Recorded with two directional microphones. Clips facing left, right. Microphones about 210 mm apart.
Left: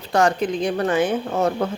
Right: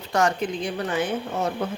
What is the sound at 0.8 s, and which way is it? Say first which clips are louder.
Speech: left 5 dB; 60° left (ahead or behind).